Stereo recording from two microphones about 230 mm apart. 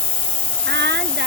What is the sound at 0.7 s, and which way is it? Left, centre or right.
Hiss, right.